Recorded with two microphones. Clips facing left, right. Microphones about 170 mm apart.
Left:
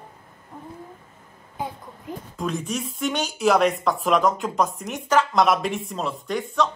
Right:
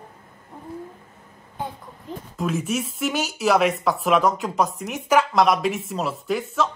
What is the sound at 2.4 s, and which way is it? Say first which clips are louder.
A woman's voice: right 3 dB; 5° right (ahead or behind).